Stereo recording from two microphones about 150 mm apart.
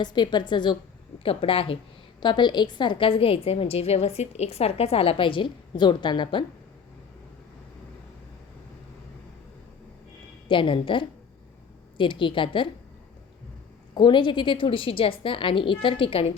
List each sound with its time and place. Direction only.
0.0 s a woman's voice: 30° left (ahead or behind)
10.5 s a woman's voice: 35° left (ahead or behind)
13.9 s a woman's voice: 30° left (ahead or behind)